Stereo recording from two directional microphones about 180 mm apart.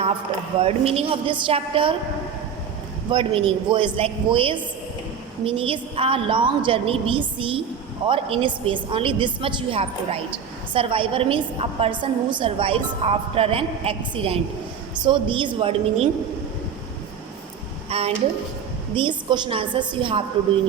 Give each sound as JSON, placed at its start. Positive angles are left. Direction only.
{"t": 0.6, "sound": "a woman's voice", "side_deg": -30}
{"t": 3.1, "sound": "a woman's voice", "side_deg": -30}
{"t": 17.8, "sound": "a sound", "side_deg": -35}
{"t": 18.9, "sound": "a woman's voice", "side_deg": -25}